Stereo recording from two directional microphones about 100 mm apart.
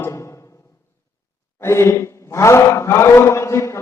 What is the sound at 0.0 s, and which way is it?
Music, 30° left (ahead or behind).